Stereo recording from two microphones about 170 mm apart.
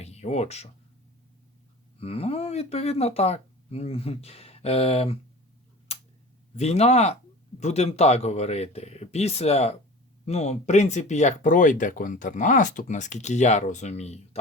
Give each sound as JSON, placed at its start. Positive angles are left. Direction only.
{"t": 0.0, "sound": "speech", "side_deg": 40}
{"t": 2.0, "sound": "speech", "side_deg": 35}
{"t": 5.9, "sound": "tick-tock", "side_deg": 40}
{"t": 6.6, "sound": "speech", "side_deg": 40}